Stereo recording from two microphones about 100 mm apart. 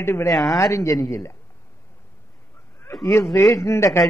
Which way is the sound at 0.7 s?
30° left (ahead or behind).